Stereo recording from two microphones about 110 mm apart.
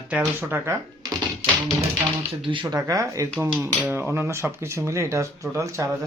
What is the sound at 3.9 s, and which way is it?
Speech, 20° right (ahead or behind).